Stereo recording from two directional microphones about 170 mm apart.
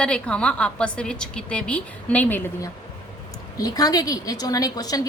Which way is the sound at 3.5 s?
20° left (ahead or behind).